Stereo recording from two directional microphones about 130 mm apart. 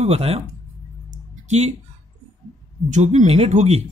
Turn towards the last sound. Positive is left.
turn(degrees=-55)  # may be behind; listen again after turning